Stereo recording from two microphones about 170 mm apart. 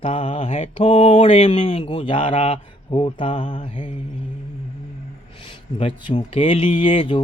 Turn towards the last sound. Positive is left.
turn(degrees=30)  # may be behind; listen again after turning